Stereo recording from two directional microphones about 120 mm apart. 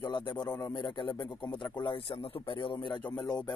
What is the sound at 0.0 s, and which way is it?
A man's voice, 40° left (ahead or behind).